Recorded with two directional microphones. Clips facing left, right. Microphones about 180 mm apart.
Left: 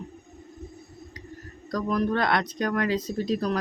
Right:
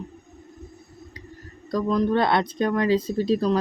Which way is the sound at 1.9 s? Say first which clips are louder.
Right 3 dB; 25° right (ahead or behind).